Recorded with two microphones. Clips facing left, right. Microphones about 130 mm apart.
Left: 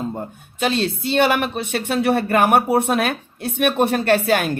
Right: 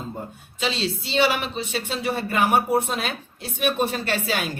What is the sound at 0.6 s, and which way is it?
A woman's voice, 55° left (ahead or behind).